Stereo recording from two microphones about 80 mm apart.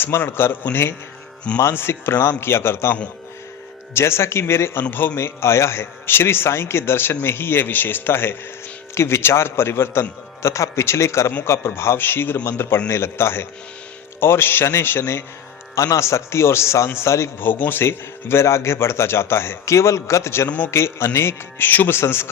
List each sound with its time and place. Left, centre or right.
0.0 s a man's voice: left
17.5 s a man's voice: left